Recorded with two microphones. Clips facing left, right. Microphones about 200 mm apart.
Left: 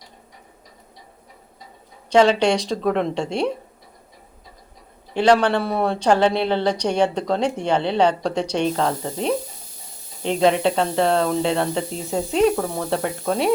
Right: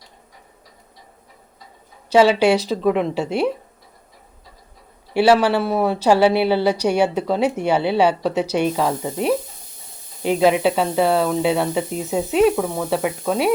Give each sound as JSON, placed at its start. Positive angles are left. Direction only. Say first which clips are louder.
{"t": 2.0, "sound": "speech", "louder": "right 2 dB", "side_deg": -5}
{"t": 5.1, "sound": "a woman's voice", "louder": "right 2 dB", "side_deg": -5}